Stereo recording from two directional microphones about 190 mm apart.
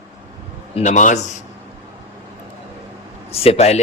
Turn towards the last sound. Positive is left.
turn(degrees=35)  # may be behind; listen again after turning